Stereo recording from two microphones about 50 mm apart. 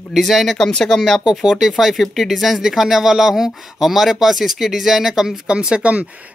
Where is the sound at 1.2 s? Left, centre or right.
Centre.